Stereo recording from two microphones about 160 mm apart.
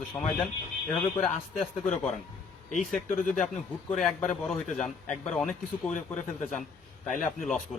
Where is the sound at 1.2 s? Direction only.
50° left (ahead or behind).